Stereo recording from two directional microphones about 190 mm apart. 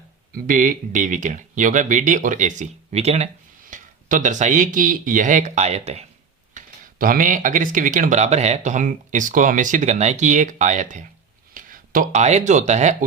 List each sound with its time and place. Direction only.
0.3 s speech: 45° right (ahead or behind)
6.5 s speech: 45° right (ahead or behind)